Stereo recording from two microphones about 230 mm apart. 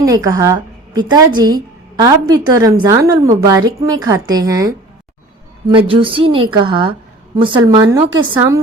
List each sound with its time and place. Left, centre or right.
0.0 s a woman's voice: centre